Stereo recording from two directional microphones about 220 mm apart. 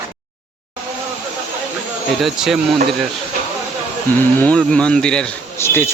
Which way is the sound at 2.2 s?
Centre (ahead or behind).